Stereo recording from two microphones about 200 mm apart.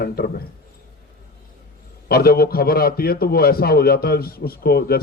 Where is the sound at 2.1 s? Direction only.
50° left (ahead or behind).